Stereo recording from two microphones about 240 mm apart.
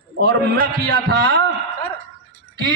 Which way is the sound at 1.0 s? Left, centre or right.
Right.